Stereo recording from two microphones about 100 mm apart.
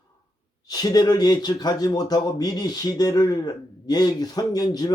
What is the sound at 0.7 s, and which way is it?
Speech, 40° left (ahead or behind).